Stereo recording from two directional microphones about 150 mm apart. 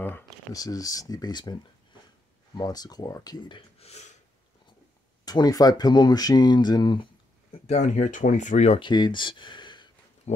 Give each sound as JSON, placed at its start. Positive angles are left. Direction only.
{"t": 0.5, "sound": "speech", "side_deg": 25}
{"t": 3.8, "sound": "a sound", "side_deg": 45}
{"t": 5.2, "sound": "speech", "side_deg": 25}
{"t": 7.6, "sound": "speech", "side_deg": 50}
{"t": 8.8, "sound": "speech", "side_deg": 30}
{"t": 10.3, "sound": "a sound", "side_deg": 50}